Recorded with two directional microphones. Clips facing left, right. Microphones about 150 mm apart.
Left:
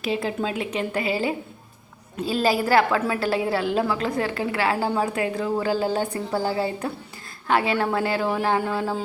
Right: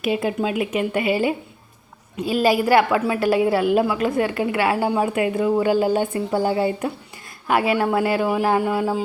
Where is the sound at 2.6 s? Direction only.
15° right (ahead or behind).